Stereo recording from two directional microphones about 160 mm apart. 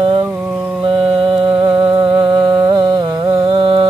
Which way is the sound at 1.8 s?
10° right (ahead or behind).